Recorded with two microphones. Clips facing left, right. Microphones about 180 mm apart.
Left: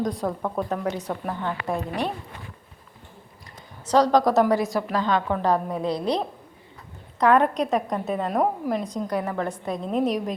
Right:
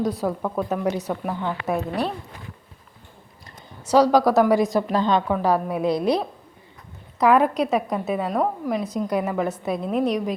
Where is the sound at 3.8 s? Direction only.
5° right (ahead or behind).